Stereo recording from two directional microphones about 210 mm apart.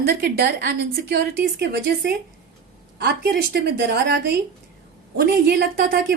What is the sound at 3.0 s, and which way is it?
A woman's voice, 50° right (ahead or behind).